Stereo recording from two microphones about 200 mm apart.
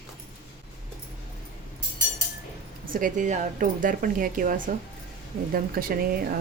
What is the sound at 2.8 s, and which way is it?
A woman's voice, 45° right (ahead or behind).